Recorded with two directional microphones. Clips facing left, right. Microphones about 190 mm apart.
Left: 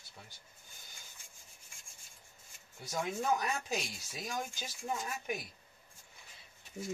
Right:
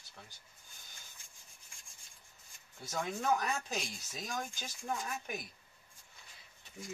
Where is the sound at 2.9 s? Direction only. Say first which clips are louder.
Even; 10° left (ahead or behind).